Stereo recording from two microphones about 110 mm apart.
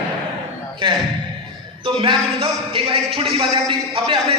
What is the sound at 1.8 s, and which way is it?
A man's voice, 50° right (ahead or behind).